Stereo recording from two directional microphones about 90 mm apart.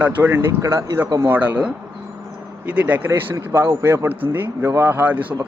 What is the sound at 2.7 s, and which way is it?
Speech, 15° right (ahead or behind).